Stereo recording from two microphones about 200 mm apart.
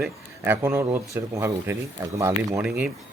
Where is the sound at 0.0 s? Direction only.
10° right (ahead or behind).